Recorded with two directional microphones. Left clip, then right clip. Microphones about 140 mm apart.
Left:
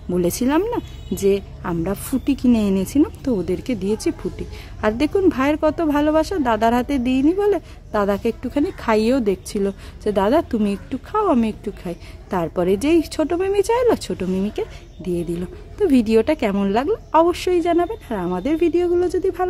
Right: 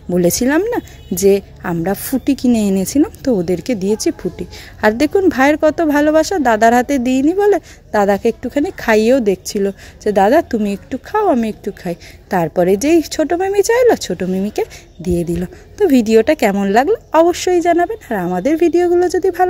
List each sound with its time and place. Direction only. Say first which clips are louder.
0.1 s a woman's voice: right 5 dB; 25° right (ahead or behind)